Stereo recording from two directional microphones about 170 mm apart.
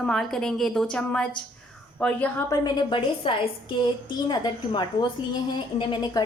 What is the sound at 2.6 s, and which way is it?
A woman's voice, 30° left (ahead or behind).